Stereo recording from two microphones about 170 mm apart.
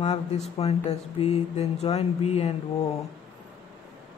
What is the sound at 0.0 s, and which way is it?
Speech, 40° left (ahead or behind).